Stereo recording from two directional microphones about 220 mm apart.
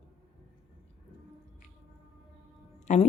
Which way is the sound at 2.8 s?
30° left (ahead or behind).